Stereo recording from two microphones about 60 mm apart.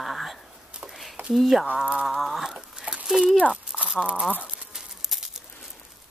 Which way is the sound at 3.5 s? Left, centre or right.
Centre.